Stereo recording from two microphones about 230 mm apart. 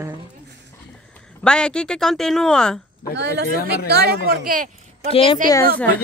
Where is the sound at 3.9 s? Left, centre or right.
Right.